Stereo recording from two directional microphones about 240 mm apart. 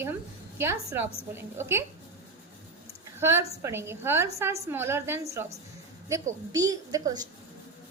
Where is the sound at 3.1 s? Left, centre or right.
Centre.